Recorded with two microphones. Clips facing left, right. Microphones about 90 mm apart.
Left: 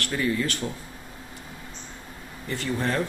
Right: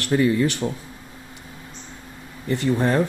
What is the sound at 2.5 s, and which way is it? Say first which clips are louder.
Speech: right 7 dB; 20° right (ahead or behind).